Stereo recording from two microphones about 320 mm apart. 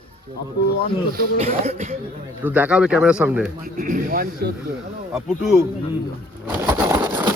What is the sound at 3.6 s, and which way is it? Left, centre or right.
Speech, right.